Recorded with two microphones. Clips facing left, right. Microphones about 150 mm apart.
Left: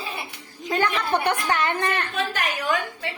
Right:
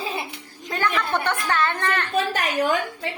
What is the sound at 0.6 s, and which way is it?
A woman's voice, 20° left (ahead or behind).